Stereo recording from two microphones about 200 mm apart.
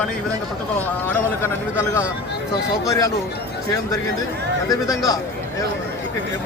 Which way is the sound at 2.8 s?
15° left (ahead or behind).